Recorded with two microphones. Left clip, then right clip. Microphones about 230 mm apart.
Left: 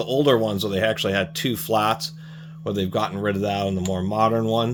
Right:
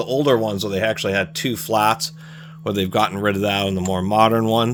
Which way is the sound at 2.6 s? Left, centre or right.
Right.